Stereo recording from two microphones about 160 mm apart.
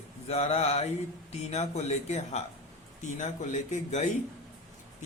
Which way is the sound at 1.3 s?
40° left (ahead or behind).